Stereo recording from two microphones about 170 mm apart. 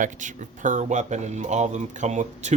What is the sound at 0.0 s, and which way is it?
Speech, 50° right (ahead or behind).